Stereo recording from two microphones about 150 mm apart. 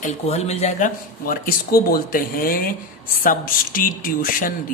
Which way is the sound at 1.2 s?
75° left (ahead or behind).